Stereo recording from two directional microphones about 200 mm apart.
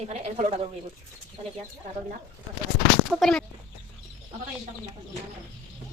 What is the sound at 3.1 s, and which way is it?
Speech, centre (ahead or behind).